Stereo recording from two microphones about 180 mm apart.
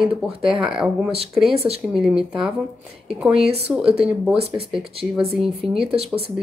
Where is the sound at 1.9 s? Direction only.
5° right (ahead or behind).